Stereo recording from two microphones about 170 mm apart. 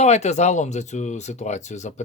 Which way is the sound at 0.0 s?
40° left (ahead or behind).